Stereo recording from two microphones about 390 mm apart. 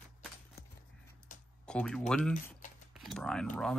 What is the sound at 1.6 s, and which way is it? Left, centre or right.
Speech, centre.